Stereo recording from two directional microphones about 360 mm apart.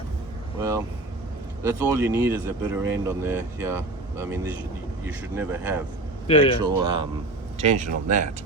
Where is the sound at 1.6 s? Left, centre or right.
Centre.